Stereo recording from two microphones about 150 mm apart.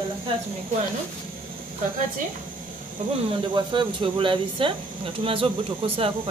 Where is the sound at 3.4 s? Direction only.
30° right (ahead or behind).